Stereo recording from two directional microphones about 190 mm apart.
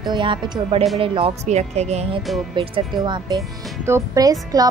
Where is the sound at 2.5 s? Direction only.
25° right (ahead or behind).